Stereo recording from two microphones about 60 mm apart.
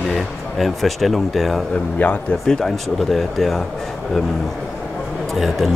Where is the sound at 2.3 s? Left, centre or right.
Centre.